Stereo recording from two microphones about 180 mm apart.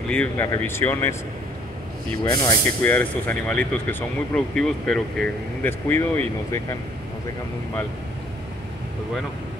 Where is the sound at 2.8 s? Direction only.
10° left (ahead or behind).